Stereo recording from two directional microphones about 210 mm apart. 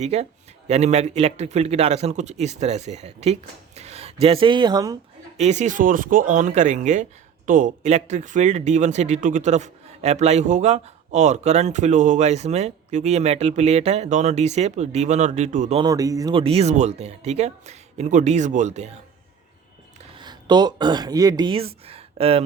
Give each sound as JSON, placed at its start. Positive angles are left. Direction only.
{"t": 0.0, "sound": "speech", "side_deg": -30}
{"t": 5.4, "sound": "speech", "side_deg": -35}
{"t": 15.8, "sound": "speech", "side_deg": -15}
{"t": 20.1, "sound": "speech", "side_deg": -20}